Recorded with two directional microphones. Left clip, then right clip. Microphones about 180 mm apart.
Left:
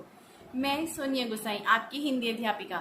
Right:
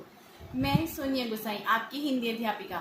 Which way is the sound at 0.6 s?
Centre (ahead or behind).